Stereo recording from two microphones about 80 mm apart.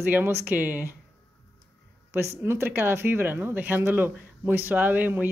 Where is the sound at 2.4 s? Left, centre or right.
Right.